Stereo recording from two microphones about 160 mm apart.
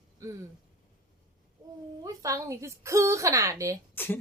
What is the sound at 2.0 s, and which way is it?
Speech, 20° right (ahead or behind).